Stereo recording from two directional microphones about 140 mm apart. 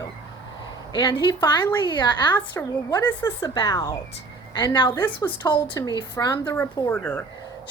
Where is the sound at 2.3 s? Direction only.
15° left (ahead or behind).